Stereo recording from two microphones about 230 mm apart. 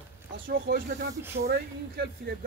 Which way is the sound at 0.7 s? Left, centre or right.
Right.